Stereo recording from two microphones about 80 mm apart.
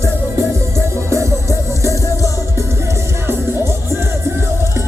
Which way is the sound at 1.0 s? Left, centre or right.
Right.